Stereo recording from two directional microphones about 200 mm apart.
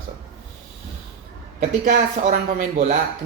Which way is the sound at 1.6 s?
40° right (ahead or behind).